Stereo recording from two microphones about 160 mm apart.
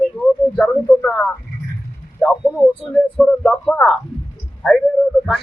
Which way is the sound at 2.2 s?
5° right (ahead or behind).